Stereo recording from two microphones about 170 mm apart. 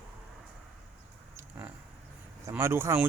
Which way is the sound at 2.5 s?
15° right (ahead or behind).